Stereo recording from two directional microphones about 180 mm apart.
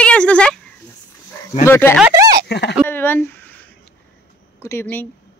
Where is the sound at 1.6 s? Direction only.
10° left (ahead or behind).